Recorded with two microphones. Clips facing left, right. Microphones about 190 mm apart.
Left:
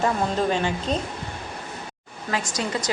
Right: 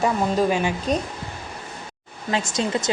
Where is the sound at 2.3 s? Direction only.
25° right (ahead or behind).